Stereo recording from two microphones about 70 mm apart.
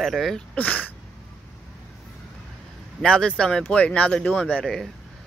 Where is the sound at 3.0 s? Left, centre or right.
Centre.